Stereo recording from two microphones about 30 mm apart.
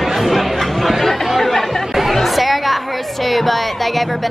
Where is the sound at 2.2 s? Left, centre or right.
Centre.